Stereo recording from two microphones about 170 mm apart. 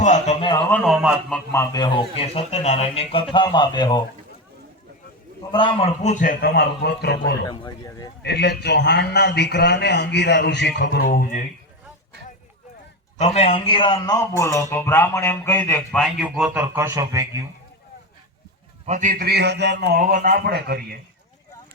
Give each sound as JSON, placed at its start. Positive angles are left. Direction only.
{"t": 0.0, "sound": "a man's voice", "side_deg": 45}
{"t": 0.7, "sound": "a man's voice", "side_deg": 5}
{"t": 1.3, "sound": "a man's voice", "side_deg": 20}
{"t": 5.5, "sound": "a man's voice", "side_deg": 30}
{"t": 6.0, "sound": "a man's voice", "side_deg": 45}
{"t": 7.4, "sound": "a man's voice", "side_deg": 30}
{"t": 8.2, "sound": "a man's voice", "side_deg": 80}
{"t": 13.1, "sound": "a man's voice", "side_deg": 40}
{"t": 16.0, "sound": "a man's voice", "side_deg": 0}
{"t": 18.9, "sound": "a man's voice", "side_deg": -50}
{"t": 20.0, "sound": "speech", "side_deg": -60}